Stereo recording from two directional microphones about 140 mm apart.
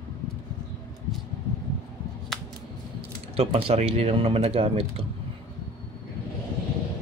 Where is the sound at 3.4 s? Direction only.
40° right (ahead or behind).